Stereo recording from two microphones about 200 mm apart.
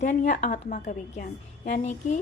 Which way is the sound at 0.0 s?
40° left (ahead or behind).